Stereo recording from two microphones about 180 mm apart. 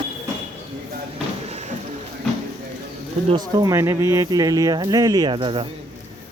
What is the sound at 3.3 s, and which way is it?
Speech, 20° right (ahead or behind).